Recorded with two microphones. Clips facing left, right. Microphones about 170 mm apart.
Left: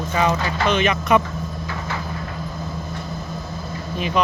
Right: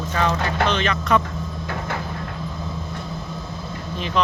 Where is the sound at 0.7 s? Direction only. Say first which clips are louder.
Left 5 dB; 15° left (ahead or behind).